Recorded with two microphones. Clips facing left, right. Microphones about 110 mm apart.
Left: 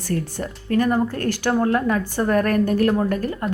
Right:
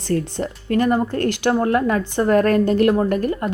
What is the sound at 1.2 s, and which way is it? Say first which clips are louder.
Speech: right 3 dB; 60° right (ahead or behind).